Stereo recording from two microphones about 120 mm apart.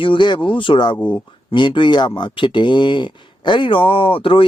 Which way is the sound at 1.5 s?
40° left (ahead or behind).